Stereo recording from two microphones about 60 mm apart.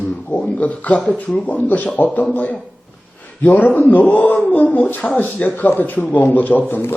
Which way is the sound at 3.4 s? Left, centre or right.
Left.